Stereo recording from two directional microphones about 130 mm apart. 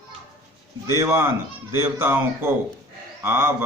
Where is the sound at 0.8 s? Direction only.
25° right (ahead or behind).